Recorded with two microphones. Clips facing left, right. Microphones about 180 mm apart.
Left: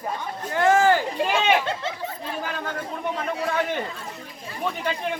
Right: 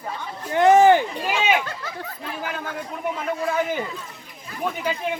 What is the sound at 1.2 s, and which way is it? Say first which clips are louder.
Speech: left 1 dB; 5° right (ahead or behind).